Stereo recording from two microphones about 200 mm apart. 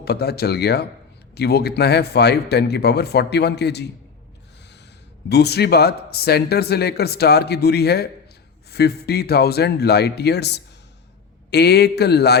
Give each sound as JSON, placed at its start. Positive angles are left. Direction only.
{"t": 0.0, "sound": "speech", "side_deg": 55}
{"t": 5.3, "sound": "speech", "side_deg": 55}